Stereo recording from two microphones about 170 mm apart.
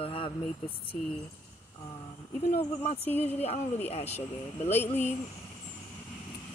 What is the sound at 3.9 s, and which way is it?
Speech, 40° left (ahead or behind).